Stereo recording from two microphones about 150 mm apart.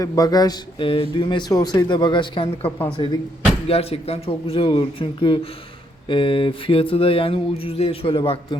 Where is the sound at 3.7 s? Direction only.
40° left (ahead or behind).